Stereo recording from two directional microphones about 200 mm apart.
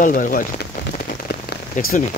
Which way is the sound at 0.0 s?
40° left (ahead or behind).